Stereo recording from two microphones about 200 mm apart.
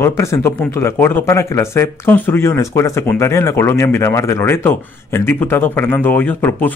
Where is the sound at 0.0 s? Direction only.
15° left (ahead or behind).